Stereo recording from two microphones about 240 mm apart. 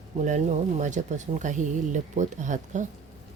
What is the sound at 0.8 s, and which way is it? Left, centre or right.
Speech, right.